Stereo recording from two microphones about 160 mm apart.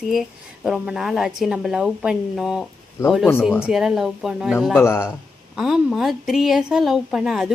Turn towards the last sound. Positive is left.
turn(degrees=0)  # may be behind; listen again after turning